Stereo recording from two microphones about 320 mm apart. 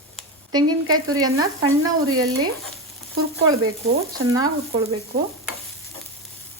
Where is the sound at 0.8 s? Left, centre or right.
Right.